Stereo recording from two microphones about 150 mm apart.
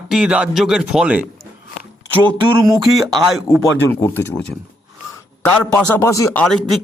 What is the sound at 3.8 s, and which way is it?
Speech, 15° left (ahead or behind).